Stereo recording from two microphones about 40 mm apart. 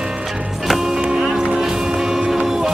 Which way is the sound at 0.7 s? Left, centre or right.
Centre.